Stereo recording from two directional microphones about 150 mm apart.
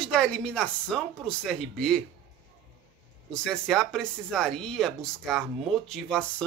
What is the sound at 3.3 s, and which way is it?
Speech, 5° left (ahead or behind).